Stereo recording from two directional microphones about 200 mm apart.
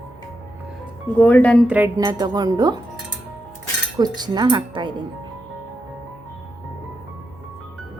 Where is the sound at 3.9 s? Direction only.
20° right (ahead or behind).